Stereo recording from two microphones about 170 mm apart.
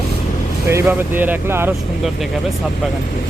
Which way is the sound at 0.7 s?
10° right (ahead or behind).